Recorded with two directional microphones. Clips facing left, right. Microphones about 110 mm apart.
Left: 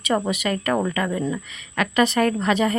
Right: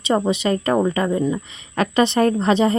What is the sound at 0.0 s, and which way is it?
Speech, 25° right (ahead or behind).